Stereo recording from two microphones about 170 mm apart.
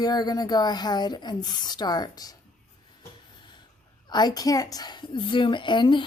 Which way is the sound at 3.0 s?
25° left (ahead or behind).